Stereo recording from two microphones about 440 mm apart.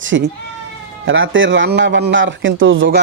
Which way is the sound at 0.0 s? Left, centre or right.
Right.